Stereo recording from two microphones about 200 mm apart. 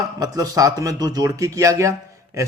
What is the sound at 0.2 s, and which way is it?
A man's voice, 20° right (ahead or behind).